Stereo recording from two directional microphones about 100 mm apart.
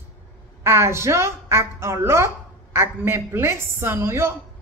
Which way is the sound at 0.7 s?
25° right (ahead or behind).